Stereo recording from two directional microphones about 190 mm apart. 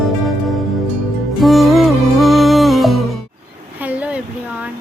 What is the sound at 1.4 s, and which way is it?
Music, centre (ahead or behind).